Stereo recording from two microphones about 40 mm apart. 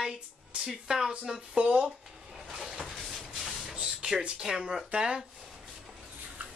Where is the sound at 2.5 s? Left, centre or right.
Centre.